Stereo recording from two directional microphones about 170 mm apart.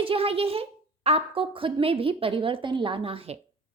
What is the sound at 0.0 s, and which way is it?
A woman's voice, 35° right (ahead or behind).